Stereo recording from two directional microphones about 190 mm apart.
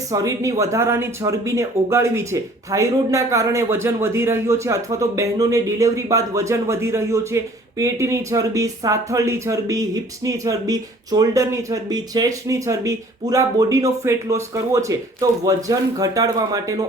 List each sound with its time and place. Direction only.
0.1 s speech: 15° right (ahead or behind)